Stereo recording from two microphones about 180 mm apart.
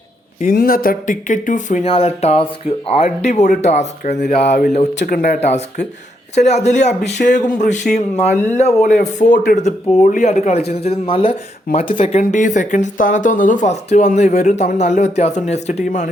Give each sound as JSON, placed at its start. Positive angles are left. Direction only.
{"t": 0.5, "sound": "speech", "side_deg": 55}